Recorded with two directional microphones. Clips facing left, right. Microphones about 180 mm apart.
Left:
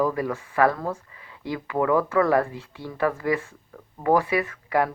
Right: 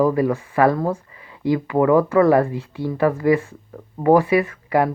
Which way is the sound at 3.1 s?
25° right (ahead or behind).